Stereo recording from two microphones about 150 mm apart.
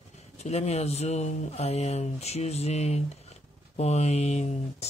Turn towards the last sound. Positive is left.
turn(degrees=45)  # may be behind; listen again after turning